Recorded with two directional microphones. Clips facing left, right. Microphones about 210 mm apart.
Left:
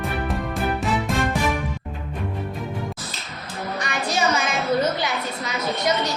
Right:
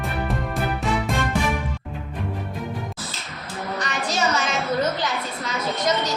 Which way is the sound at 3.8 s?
10° left (ahead or behind).